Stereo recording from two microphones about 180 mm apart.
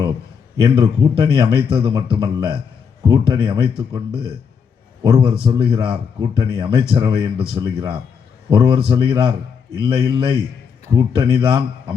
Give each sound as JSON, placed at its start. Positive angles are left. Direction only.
{"t": 0.5, "sound": "speech", "side_deg": -25}